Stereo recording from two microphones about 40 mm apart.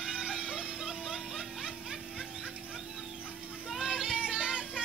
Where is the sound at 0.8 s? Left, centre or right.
Centre.